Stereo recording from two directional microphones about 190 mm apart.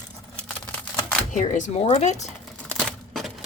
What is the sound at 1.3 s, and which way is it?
Speech, 40° left (ahead or behind).